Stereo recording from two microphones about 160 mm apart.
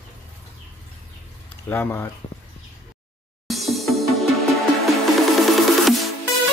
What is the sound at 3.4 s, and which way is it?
Music, centre (ahead or behind).